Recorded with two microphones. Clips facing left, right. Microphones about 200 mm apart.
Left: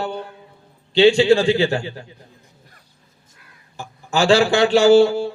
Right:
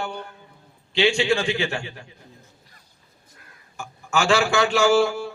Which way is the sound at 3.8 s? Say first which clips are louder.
Left 4 dB; 35° left (ahead or behind).